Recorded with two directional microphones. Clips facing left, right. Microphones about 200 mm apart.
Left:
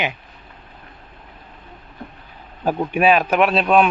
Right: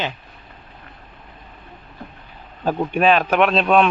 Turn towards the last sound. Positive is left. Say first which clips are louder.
# even
turn(degrees=5)  # may be behind; listen again after turning